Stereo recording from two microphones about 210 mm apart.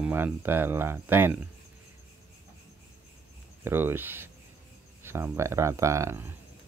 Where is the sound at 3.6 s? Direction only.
10° right (ahead or behind).